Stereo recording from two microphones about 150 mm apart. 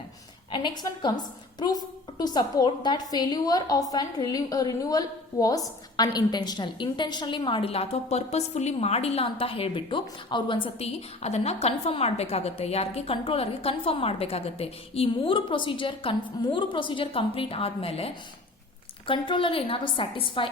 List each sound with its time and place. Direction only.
0.5 s a woman's voice: 30° left (ahead or behind)